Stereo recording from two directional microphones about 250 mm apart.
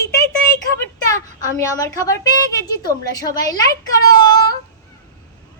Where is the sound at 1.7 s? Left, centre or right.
Centre.